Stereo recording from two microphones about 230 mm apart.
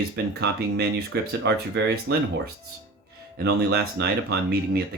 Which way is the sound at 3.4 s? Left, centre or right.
Right.